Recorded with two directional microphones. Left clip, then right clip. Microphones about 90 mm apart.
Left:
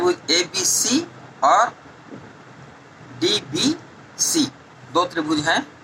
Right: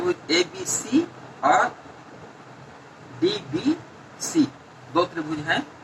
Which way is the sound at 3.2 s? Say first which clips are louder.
Left 4 dB; 30° left (ahead or behind).